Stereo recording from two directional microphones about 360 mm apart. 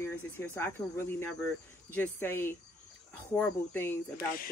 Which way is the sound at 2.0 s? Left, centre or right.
Centre.